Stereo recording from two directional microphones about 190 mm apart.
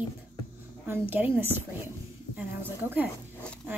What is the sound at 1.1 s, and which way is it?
Speech, 10° right (ahead or behind).